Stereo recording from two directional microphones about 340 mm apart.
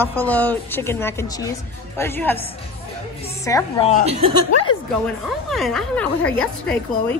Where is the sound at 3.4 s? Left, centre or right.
Centre.